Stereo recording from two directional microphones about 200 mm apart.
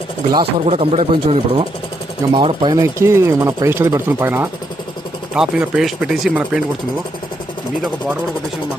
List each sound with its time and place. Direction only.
0.6 s speech: 30° right (ahead or behind); by 6.6 s 5° right (ahead or behind)